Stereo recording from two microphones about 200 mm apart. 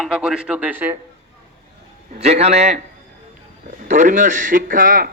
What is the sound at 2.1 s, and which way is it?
Speech, 30° right (ahead or behind).